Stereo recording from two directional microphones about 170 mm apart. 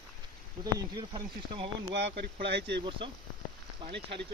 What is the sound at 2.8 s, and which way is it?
Speech, 30° right (ahead or behind).